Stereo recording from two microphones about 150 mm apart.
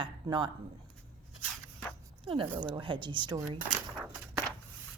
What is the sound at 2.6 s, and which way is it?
Speech, 30° right (ahead or behind).